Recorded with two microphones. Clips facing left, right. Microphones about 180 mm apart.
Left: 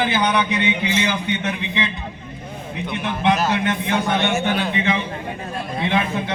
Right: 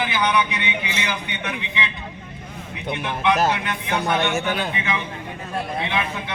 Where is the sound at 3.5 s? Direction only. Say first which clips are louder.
Left 5 dB; 30° left (ahead or behind).